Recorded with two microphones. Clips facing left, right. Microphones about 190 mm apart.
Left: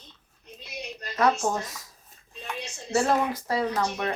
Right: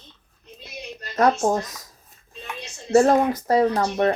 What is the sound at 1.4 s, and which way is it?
Speech, 40° right (ahead or behind).